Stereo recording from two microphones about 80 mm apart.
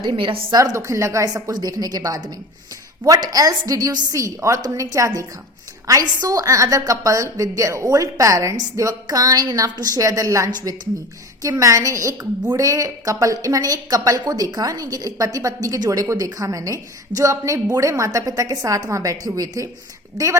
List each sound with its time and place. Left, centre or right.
0.0 s a woman's voice: right
0.5 s a woman's voice: right
6.2 s a woman's voice: right